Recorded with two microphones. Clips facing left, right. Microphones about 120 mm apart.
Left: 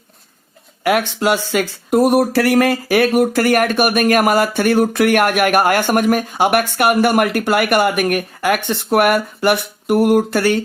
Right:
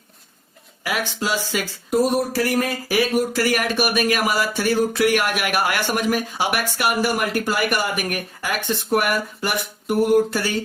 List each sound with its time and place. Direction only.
0.9 s speech: 60° left (ahead or behind)